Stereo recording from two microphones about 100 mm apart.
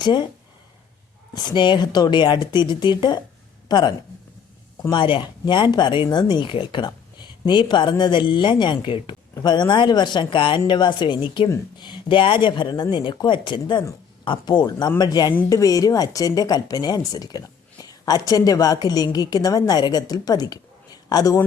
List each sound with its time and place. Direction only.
0.0 s speech: 50° left (ahead or behind)
1.3 s speech: 45° left (ahead or behind)
4.9 s a woman's voice: 55° left (ahead or behind); by 21.4 s 40° left (ahead or behind)